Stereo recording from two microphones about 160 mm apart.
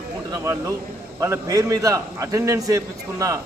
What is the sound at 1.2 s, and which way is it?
A man's voice, 20° right (ahead or behind).